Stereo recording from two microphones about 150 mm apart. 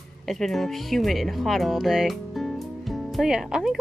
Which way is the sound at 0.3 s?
Centre (ahead or behind).